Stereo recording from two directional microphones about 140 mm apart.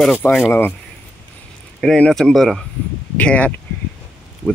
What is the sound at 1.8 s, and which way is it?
Speech, 5° left (ahead or behind).